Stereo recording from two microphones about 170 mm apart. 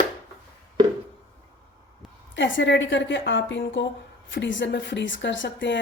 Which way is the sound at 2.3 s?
90° left.